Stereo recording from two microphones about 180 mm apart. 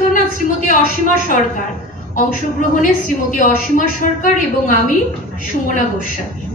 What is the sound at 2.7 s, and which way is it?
A woman's voice, 45° left (ahead or behind).